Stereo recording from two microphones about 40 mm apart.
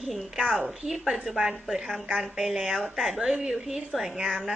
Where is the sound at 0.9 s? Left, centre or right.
Centre.